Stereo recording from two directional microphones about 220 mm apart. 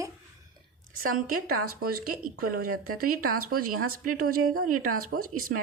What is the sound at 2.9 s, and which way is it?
Speech, 90° right.